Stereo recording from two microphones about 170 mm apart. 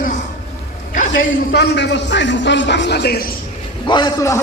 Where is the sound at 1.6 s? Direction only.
90° left; by 3.3 s 70° left (ahead or behind).